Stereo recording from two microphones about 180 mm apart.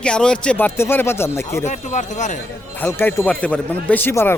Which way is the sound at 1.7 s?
40° left (ahead or behind).